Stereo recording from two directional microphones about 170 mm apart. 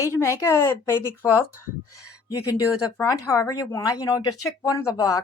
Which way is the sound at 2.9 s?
20° left (ahead or behind).